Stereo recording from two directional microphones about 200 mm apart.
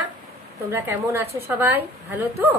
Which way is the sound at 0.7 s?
10° right (ahead or behind).